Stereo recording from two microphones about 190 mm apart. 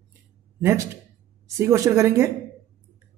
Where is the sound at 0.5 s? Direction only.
15° right (ahead or behind).